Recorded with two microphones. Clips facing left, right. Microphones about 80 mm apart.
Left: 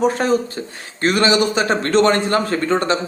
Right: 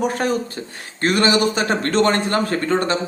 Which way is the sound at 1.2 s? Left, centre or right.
Right.